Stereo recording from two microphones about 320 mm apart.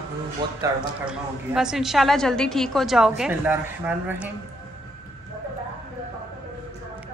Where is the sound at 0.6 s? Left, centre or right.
Centre.